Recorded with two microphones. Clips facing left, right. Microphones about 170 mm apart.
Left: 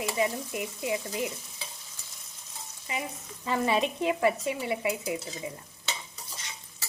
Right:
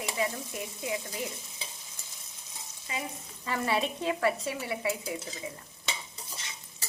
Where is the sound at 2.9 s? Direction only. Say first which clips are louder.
Left 2 dB; 15° left (ahead or behind).